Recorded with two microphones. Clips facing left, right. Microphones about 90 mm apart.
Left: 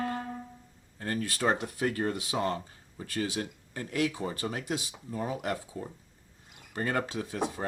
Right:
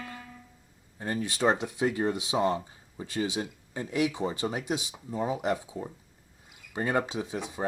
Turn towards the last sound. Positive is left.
turn(degrees=-15)  # may be behind; listen again after turning